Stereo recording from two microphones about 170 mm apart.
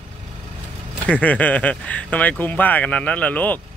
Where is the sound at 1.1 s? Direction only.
10° left (ahead or behind).